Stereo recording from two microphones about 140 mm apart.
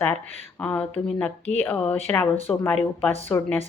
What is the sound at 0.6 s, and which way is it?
A woman's voice, 10° left (ahead or behind).